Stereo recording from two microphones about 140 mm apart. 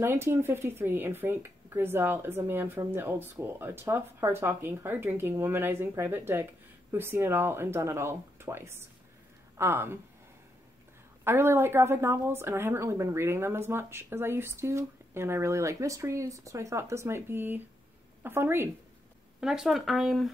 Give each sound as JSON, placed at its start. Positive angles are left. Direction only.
{"t": 0.0, "sound": "a woman's voice", "side_deg": -15}
{"t": 11.2, "sound": "a woman's voice", "side_deg": -15}
{"t": 19.4, "sound": "speech", "side_deg": -5}